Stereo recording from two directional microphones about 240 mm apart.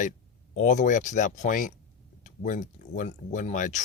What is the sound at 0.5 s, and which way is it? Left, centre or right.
Speech, left.